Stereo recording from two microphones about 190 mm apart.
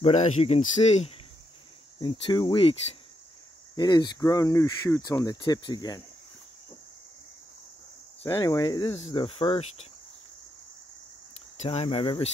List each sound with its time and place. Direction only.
0.0 s cricket: 35° left (ahead or behind)
2.0 s speech: 25° left (ahead or behind)
8.4 s speech: 20° left (ahead or behind)
8.9 s cricket: 30° left (ahead or behind)
11.5 s cricket: 35° left (ahead or behind)